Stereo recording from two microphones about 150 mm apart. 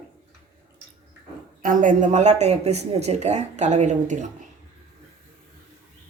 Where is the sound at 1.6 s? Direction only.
65° right (ahead or behind).